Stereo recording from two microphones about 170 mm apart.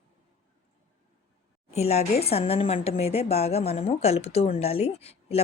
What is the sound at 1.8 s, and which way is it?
A woman's voice, 40° left (ahead or behind).